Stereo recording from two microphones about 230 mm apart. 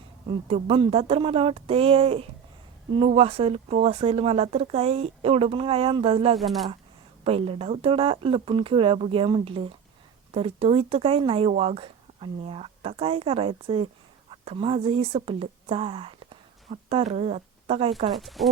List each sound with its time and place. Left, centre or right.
0.3 s speech: right
6.3 s speech: centre
7.3 s a woman's voice: right
18.1 s speech: centre